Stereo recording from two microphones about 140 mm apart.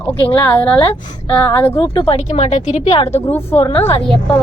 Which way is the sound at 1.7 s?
40° left (ahead or behind).